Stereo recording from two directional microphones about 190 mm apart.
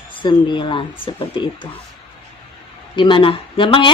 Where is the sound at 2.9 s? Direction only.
25° left (ahead or behind).